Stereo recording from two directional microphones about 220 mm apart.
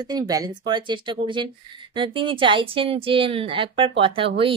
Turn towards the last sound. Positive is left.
turn(degrees=-25)  # may be behind; listen again after turning